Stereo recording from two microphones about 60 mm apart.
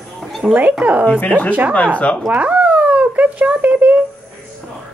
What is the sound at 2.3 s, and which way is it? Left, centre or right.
Cat, centre.